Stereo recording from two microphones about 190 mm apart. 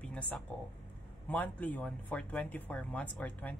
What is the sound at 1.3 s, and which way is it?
A man's voice, 10° left (ahead or behind).